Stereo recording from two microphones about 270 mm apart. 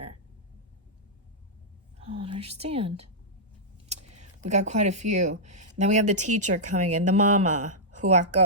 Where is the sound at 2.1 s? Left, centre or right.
Right.